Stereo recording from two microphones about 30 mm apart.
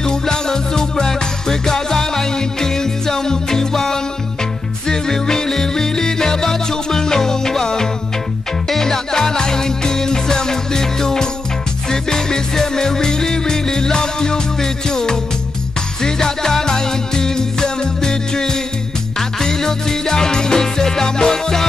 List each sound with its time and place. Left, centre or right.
0.0 s music: left